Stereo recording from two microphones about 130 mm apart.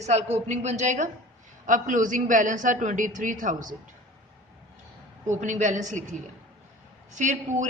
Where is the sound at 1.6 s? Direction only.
80° right.